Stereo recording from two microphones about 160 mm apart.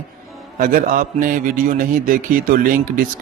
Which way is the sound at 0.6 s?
65° right (ahead or behind).